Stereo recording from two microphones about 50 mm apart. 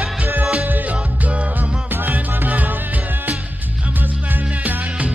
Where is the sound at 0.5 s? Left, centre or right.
Right.